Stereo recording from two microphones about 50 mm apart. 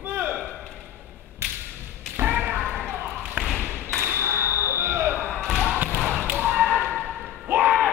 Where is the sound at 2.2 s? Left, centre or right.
Right.